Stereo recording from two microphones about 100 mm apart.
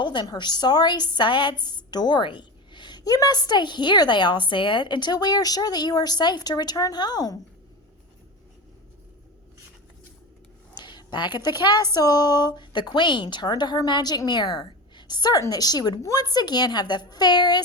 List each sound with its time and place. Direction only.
0.0 s a woman's voice: 50° left (ahead or behind)
10.8 s a woman's voice: 50° left (ahead or behind)